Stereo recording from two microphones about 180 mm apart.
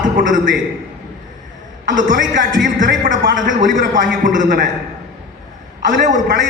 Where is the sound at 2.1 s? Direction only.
90° right.